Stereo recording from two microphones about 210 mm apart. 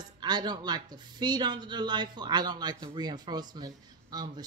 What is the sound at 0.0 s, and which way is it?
Speech, 20° right (ahead or behind).